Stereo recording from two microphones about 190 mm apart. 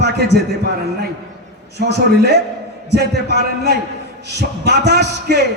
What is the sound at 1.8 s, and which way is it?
A man's voice, 60° right (ahead or behind).